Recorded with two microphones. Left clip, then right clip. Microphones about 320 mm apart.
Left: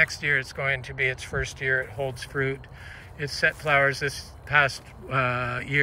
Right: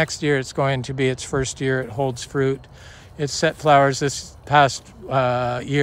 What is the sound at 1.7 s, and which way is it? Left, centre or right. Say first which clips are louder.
Speech: right 4 dB; right.